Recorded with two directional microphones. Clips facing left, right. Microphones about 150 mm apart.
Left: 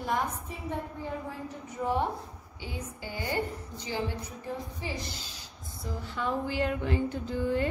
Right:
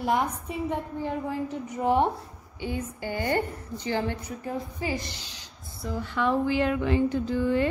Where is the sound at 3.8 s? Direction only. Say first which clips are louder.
Right 5 dB; 65° right (ahead or behind).